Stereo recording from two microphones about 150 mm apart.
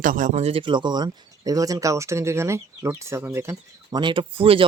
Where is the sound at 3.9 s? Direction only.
30° right (ahead or behind).